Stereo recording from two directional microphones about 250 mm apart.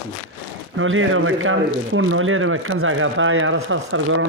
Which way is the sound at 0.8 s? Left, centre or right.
Right.